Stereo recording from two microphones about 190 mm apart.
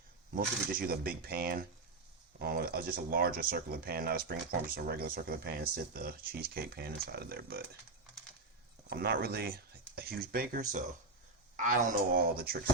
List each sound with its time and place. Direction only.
0.3 s speech: 50° right (ahead or behind)
8.9 s speech: 55° right (ahead or behind)